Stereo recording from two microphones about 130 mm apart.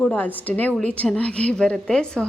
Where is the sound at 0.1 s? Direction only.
15° left (ahead or behind).